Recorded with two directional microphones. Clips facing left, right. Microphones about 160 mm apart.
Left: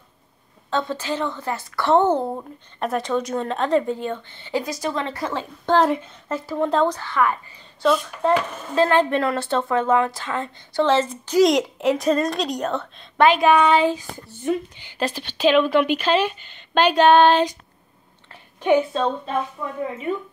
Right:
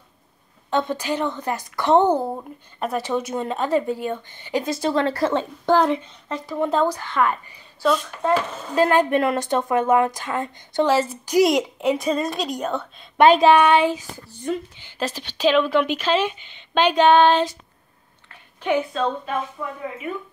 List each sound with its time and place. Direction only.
0.7 s a woman's voice: 15° right (ahead or behind)
2.2 s a woman's voice: centre (ahead or behind)
4.6 s a woman's voice: 30° right (ahead or behind)
5.8 s a woman's voice: centre (ahead or behind)
7.0 s a woman's voice: 20° right (ahead or behind)
7.8 s a woman's voice: centre (ahead or behind)
8.6 s a woman's voice: 15° right (ahead or behind)
14.4 s a woman's voice: 10° left (ahead or behind)
18.3 s a sound: 20° left (ahead or behind)
20.1 s speech: 30° left (ahead or behind)